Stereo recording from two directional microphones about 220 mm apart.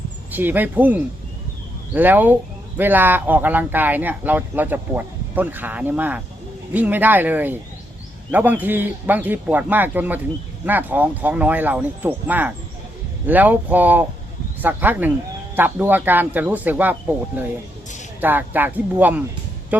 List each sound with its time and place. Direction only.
0.3 s speech: 10° right (ahead or behind)